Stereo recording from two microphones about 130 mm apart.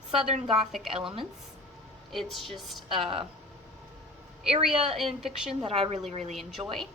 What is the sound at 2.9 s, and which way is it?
Speech, 45° right (ahead or behind).